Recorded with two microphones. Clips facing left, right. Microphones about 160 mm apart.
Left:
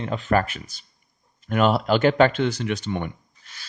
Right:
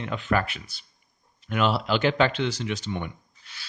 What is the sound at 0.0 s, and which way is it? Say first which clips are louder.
Speech: left 4 dB; 40° left (ahead or behind).